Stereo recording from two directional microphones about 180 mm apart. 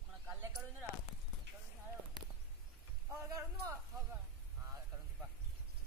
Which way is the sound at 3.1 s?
15° right (ahead or behind).